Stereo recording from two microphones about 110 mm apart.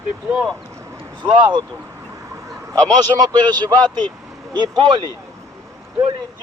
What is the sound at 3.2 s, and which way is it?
Speech, 40° right (ahead or behind).